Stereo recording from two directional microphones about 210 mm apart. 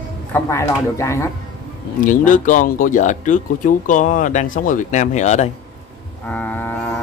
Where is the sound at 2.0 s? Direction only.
40° left (ahead or behind).